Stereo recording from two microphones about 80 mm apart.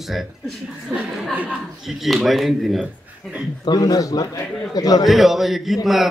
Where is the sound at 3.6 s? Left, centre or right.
Left.